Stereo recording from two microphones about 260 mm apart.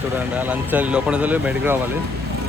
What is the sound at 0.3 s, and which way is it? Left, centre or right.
Speech, centre.